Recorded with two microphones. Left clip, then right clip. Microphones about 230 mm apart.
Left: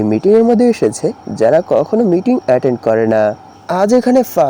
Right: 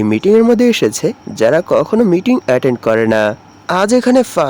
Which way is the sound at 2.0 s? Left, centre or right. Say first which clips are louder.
Right 1 dB; centre.